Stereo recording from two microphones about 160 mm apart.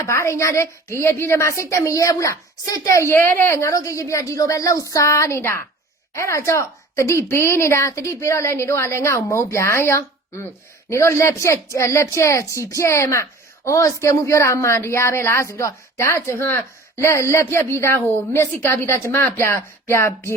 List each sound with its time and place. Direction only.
0.0 s a woman's voice: 15° left (ahead or behind)